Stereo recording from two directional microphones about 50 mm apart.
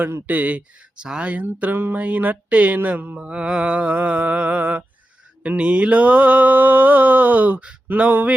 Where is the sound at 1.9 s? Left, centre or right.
Right.